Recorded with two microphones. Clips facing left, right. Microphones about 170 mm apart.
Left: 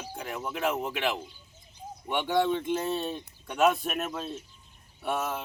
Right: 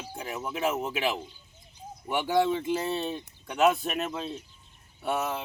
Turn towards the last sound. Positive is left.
turn(degrees=0)  # may be behind; listen again after turning